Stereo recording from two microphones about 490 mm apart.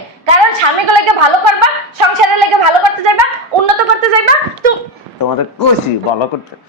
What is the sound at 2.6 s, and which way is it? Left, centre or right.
Speech, right.